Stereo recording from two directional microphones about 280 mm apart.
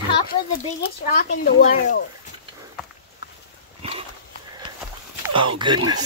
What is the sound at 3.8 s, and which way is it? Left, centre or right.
Walk, centre.